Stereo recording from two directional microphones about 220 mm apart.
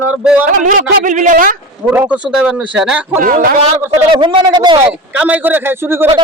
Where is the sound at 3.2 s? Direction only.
40° right (ahead or behind).